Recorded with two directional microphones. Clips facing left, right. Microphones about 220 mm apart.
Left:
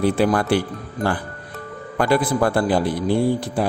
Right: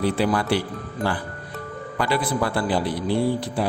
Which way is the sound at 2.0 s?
50° left (ahead or behind).